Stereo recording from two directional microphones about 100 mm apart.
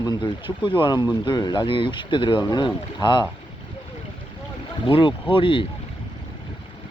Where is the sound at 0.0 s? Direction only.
50° left (ahead or behind).